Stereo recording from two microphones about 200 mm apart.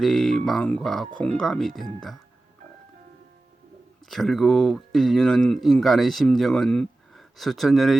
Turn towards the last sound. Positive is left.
turn(degrees=0)  # may be behind; listen again after turning